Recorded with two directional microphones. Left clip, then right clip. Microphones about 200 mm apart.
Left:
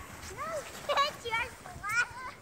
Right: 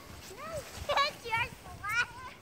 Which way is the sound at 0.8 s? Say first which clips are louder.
Even; 55° left (ahead or behind).